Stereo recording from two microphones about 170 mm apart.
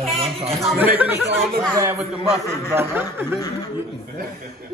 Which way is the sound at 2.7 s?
15° right (ahead or behind).